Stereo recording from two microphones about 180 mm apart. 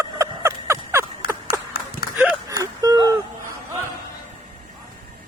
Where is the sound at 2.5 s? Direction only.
20° right (ahead or behind).